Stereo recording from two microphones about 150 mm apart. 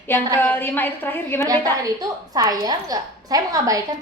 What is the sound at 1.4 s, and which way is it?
A woman's voice, 25° right (ahead or behind).